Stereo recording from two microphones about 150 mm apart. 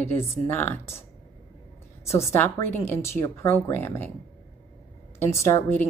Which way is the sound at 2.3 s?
15° left (ahead or behind).